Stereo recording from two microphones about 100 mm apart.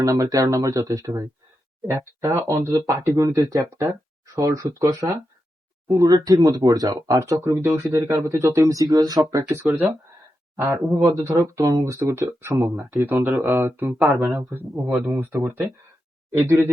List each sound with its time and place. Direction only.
0.0 s speech: 35° right (ahead or behind)
3.2 s speech: 35° right (ahead or behind)
9.6 s speech: 15° right (ahead or behind)
10.6 s speech: 30° right (ahead or behind)